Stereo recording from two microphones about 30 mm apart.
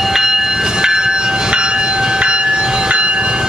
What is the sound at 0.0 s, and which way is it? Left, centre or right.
Train, centre.